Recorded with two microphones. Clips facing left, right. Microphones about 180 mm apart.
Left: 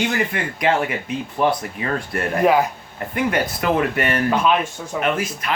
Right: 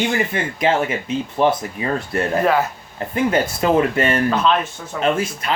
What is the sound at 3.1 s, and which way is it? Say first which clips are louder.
Speech: right 3 dB; 25° right (ahead or behind).